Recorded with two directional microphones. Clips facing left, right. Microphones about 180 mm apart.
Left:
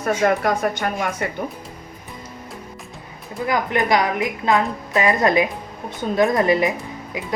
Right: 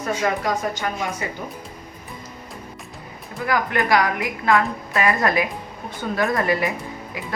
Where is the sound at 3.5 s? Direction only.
20° left (ahead or behind).